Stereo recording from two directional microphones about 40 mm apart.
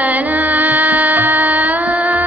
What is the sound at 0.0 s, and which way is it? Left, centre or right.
Music, right.